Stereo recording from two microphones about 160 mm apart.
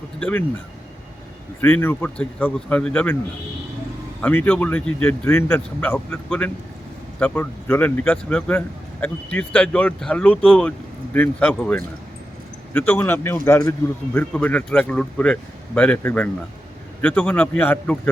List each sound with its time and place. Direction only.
0.2 s speech: 5° left (ahead or behind)
1.6 s speech: 10° left (ahead or behind)
4.2 s speech: 10° left (ahead or behind)